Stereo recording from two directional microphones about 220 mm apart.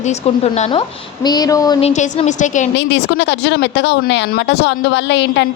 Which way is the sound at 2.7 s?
55° left (ahead or behind).